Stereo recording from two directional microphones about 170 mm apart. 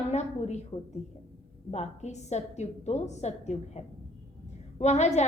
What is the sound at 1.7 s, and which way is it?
A woman's voice, 40° left (ahead or behind).